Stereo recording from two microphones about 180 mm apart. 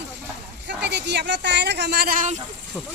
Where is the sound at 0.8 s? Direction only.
70° right (ahead or behind); by 2.4 s 45° right (ahead or behind).